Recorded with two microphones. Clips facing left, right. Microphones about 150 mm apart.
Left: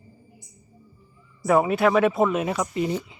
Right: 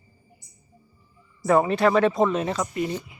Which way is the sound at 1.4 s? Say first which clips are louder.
Even; 5° left (ahead or behind).